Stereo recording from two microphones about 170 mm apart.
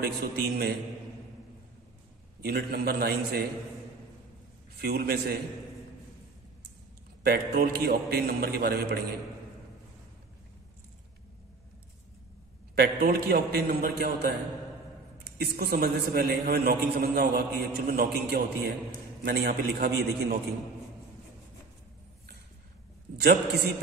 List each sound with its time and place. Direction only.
0.0 s a man's voice: 65° right (ahead or behind)
2.4 s a man's voice: 65° right (ahead or behind)
4.7 s a man's voice: 65° right (ahead or behind)
7.2 s a man's voice: 65° right (ahead or behind)
12.7 s a man's voice: 65° right (ahead or behind)
23.1 s a man's voice: 75° right (ahead or behind)